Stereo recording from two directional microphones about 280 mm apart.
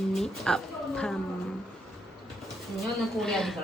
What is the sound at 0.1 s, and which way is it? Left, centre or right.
Speech, centre.